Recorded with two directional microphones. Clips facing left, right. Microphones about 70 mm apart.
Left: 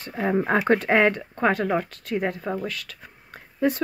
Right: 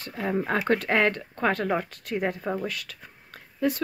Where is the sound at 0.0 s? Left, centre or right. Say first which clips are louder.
Left 4 dB; left.